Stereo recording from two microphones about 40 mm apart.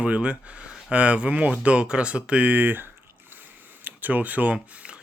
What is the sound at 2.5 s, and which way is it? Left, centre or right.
Speech, right.